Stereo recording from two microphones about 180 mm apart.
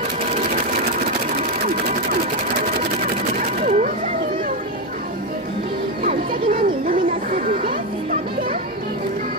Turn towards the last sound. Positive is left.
turn(degrees=-50)  # may be behind; listen again after turning